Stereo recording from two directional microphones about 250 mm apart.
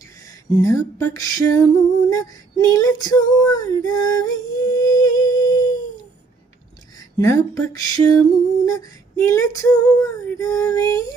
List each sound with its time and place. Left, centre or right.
0.3 s a sound: centre
1.1 s female singing: centre
5.3 s humming: centre
7.2 s female singing: centre